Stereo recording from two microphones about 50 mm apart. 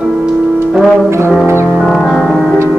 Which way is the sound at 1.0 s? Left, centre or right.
Right.